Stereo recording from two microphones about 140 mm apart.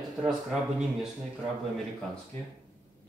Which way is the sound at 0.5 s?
Centre (ahead or behind).